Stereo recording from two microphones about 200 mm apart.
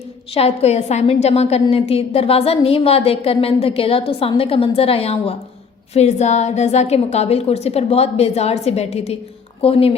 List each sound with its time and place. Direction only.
0.3 s a woman's voice: 30° left (ahead or behind)